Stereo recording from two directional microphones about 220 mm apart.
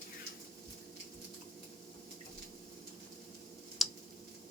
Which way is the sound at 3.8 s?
Centre (ahead or behind).